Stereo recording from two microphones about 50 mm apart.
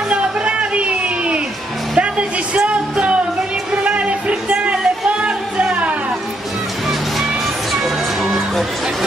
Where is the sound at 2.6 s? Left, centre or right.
Right.